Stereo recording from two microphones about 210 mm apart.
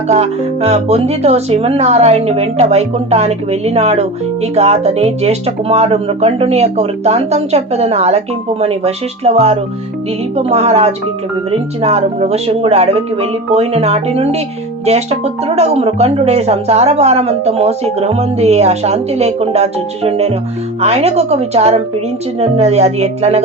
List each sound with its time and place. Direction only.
0.1 s speech: 30° right (ahead or behind)